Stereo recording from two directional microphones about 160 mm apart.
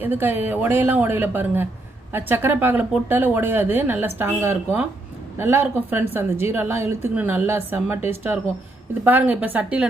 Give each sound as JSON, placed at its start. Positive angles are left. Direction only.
{"t": 0.0, "sound": "speech", "side_deg": -15}